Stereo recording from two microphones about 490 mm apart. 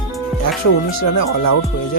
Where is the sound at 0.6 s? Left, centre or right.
Left.